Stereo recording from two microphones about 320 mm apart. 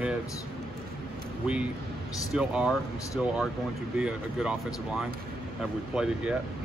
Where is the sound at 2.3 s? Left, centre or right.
Centre.